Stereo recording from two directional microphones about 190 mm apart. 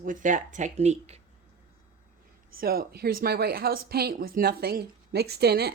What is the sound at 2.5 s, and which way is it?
Speech, 50° right (ahead or behind).